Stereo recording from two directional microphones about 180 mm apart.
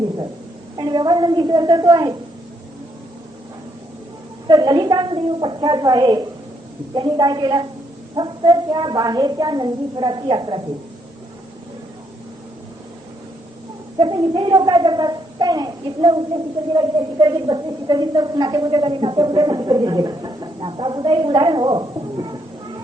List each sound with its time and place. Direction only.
0.8 s a child's voice: 25° right (ahead or behind)
4.4 s a child's voice: 25° right (ahead or behind)
14.0 s a child's voice: 25° right (ahead or behind)